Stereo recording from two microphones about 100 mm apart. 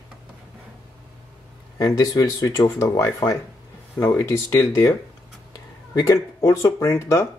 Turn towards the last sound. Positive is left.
turn(degrees=30)  # may be behind; listen again after turning